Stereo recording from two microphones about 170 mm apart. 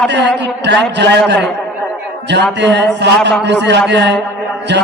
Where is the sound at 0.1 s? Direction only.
90° right.